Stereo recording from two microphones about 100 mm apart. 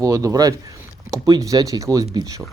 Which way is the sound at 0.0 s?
35° right (ahead or behind).